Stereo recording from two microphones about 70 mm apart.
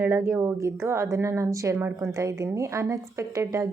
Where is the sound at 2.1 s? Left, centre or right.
Right.